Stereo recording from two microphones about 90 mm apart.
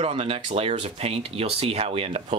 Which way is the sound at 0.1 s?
90° right.